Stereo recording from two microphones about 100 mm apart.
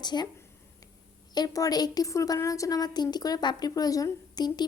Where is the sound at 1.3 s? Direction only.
40° left (ahead or behind).